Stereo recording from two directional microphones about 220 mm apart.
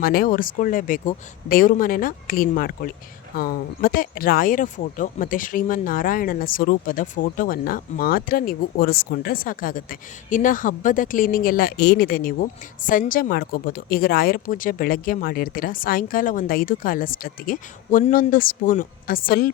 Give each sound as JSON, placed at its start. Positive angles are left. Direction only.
{"t": 0.0, "sound": "speech", "side_deg": 40}